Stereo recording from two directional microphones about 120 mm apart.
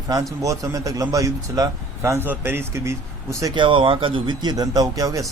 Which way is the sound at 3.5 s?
45° right (ahead or behind).